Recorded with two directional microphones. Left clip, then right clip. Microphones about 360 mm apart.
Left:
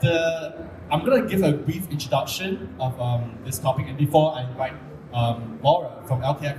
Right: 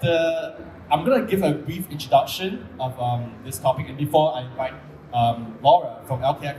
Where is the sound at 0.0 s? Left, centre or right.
Centre.